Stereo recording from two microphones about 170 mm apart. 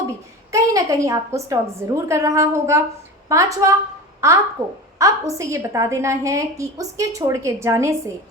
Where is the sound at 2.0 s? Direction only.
15° right (ahead or behind).